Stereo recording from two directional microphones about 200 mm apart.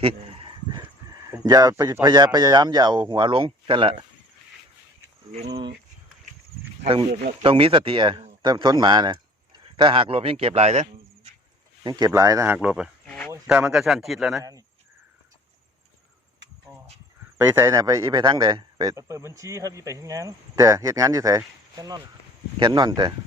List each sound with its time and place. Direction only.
0.0 s a sound: 30° right (ahead or behind)
1.3 s speech: 20° right (ahead or behind)
5.3 s speech: 30° right (ahead or behind)
7.4 s speech: 25° right (ahead or behind)
11.8 s speech: 20° right (ahead or behind)
12.5 s a sound: 5° right (ahead or behind)
13.3 s a man's voice: 10° right (ahead or behind)
17.3 s speech: 10° right (ahead or behind)